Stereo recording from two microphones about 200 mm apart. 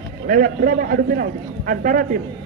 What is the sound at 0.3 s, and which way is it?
A man's voice, 45° right (ahead or behind).